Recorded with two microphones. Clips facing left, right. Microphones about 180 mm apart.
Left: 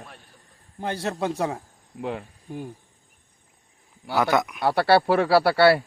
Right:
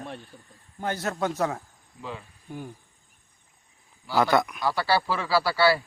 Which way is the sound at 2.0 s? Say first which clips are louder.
Left 8 dB; 60° left (ahead or behind).